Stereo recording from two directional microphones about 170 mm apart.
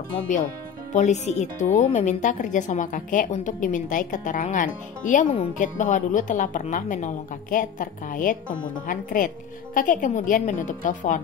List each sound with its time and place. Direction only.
0.9 s speech: 45° left (ahead or behind)